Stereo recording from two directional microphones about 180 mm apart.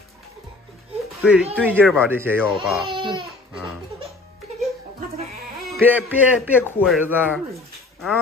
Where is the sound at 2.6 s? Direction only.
Centre (ahead or behind).